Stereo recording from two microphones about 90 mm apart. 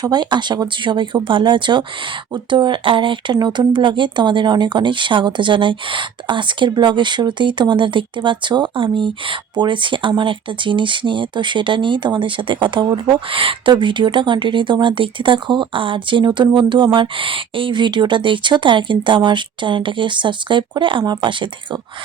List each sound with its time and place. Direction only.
0.0 s speech: 50° right (ahead or behind); by 3.3 s 70° right (ahead or behind)
3.3 s speech: 50° right (ahead or behind)